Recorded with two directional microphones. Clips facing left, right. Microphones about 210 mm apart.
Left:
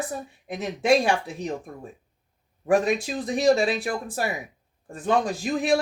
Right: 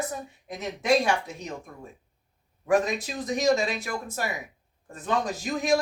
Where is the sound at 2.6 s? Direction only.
30° left (ahead or behind).